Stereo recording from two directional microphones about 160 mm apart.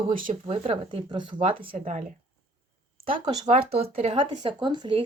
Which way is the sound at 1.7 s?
50° right (ahead or behind).